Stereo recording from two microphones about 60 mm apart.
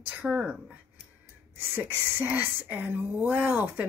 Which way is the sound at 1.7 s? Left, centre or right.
Right.